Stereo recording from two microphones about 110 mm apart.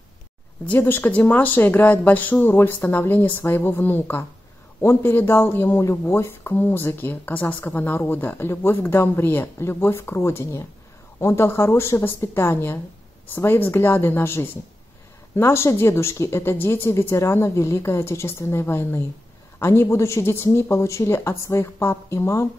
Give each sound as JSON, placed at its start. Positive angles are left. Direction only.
{"t": 0.7, "sound": "speech", "side_deg": 20}